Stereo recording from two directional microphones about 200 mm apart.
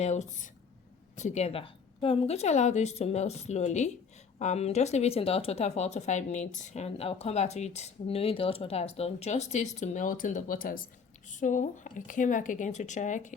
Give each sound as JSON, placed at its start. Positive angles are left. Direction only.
{"t": 0.0, "sound": "speech", "side_deg": 35}